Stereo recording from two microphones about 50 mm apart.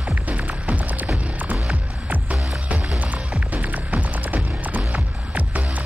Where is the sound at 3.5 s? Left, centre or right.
Right.